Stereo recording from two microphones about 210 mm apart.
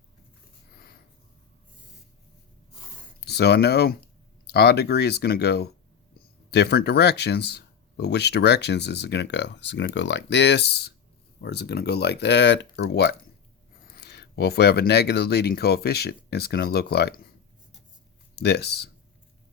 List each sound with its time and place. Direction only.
3.2 s speech: 50° left (ahead or behind)
18.3 s speech: 50° left (ahead or behind)